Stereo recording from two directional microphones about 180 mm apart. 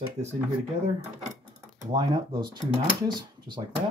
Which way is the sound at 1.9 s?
25° right (ahead or behind).